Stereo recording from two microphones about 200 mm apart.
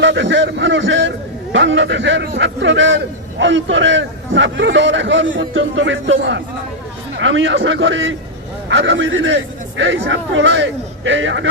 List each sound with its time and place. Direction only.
0.0 s a man's voice: 65° right (ahead or behind)